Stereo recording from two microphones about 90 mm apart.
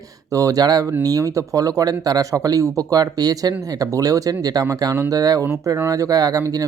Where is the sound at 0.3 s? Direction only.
40° right (ahead or behind).